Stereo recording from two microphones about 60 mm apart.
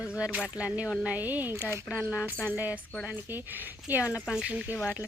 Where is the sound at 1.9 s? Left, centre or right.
Centre.